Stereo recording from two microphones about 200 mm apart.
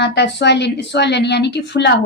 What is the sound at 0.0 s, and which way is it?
A woman's voice, 60° left (ahead or behind).